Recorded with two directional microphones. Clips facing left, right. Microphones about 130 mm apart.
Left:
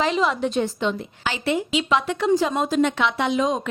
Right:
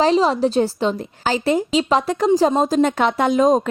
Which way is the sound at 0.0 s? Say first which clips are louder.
Right 6 dB; 35° right (ahead or behind).